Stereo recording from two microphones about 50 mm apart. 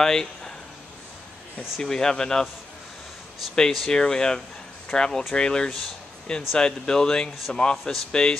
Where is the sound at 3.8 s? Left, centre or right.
Centre.